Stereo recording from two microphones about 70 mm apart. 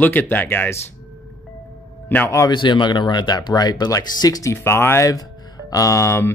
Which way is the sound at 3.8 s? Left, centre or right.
Left.